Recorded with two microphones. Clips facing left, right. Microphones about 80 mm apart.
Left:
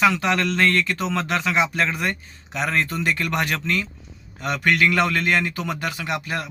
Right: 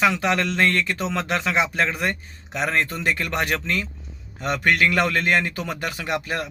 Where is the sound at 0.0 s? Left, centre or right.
Right.